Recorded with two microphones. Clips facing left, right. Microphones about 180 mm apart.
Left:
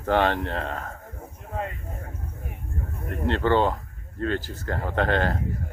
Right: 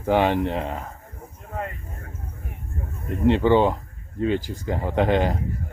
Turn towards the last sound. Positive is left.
turn(degrees=-15)  # may be behind; listen again after turning